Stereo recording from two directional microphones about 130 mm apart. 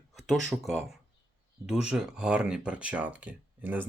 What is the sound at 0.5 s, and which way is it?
Speech, centre (ahead or behind).